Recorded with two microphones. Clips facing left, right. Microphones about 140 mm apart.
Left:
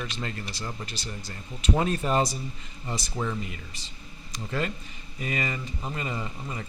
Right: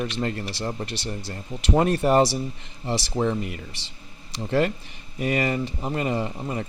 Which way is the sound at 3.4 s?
60° right (ahead or behind).